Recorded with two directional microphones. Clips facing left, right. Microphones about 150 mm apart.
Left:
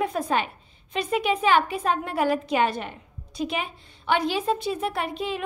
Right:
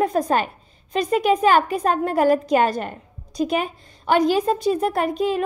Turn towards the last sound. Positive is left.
turn(degrees=-40)  # may be behind; listen again after turning